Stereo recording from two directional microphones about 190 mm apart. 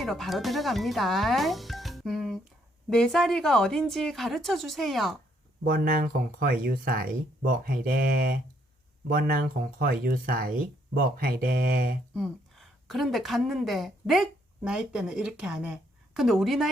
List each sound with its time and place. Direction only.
0.0 s speech: centre (ahead or behind)
5.6 s speech: 50° right (ahead or behind)
12.1 s speech: centre (ahead or behind)